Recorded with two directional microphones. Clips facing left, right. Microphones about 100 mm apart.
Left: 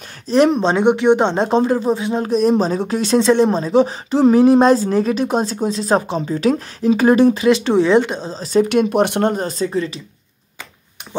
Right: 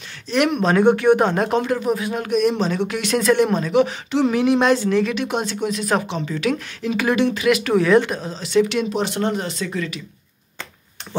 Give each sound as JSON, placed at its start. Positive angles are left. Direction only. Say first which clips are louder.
{"t": 0.3, "sound": "speech", "louder": "left 4 dB", "side_deg": 30}
{"t": 9.3, "sound": "speech", "louder": "left 5 dB", "side_deg": 40}